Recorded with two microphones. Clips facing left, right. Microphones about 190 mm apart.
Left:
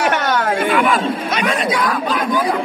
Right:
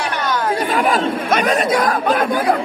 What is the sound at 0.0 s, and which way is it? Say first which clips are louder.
Chatter: left 3 dB; 70° left (ahead or behind).